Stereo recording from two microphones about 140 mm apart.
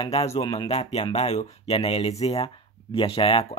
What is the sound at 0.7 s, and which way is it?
Speech, 50° left (ahead or behind).